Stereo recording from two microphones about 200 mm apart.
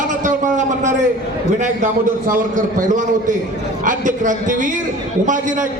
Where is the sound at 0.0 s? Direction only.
40° right (ahead or behind).